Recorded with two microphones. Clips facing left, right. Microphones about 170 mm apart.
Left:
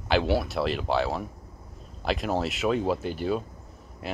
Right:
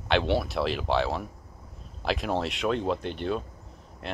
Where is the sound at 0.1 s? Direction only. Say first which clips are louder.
Left 1 dB; centre (ahead or behind).